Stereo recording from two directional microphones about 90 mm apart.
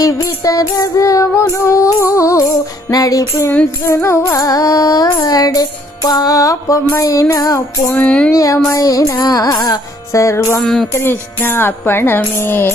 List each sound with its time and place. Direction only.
0.0 s music: 40° left (ahead or behind)
7.9 s a sound: 15° left (ahead or behind)
8.3 s music: 40° left (ahead or behind)
10.6 s speech: 5° left (ahead or behind)
10.9 s music: 25° left (ahead or behind)